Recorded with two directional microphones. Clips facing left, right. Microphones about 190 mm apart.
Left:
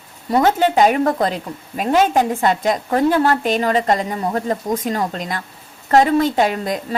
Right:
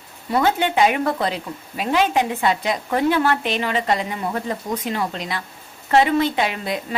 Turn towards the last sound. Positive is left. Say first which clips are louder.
# left 4 dB
turn(degrees=40)  # may be behind; listen again after turning